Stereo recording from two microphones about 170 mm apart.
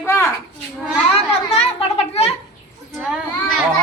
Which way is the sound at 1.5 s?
35° left (ahead or behind).